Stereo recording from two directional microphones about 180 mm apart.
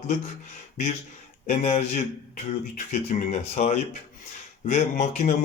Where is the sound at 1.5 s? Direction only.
35° left (ahead or behind).